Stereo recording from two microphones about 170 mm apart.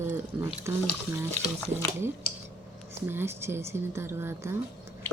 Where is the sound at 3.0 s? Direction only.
15° right (ahead or behind).